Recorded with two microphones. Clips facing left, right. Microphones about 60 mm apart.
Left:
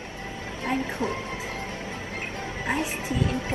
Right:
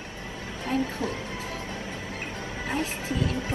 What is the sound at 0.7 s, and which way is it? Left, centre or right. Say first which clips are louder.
Speech: left 1 dB; left.